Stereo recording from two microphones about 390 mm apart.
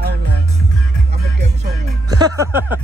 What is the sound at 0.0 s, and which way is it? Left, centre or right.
Music, right.